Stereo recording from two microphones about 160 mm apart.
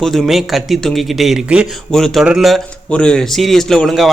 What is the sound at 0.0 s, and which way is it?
Speech, centre (ahead or behind).